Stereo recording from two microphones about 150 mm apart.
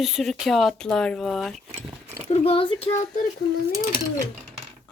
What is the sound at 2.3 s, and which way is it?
Speech, 40° left (ahead or behind).